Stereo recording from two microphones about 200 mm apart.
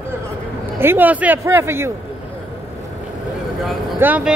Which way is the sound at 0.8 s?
10° right (ahead or behind).